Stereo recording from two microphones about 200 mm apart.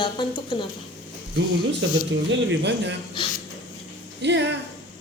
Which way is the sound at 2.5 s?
60° right (ahead or behind).